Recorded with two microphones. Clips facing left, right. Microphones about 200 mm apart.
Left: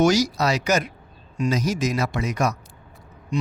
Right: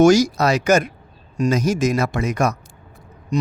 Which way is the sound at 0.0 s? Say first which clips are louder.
Right 6 dB; 50° right (ahead or behind).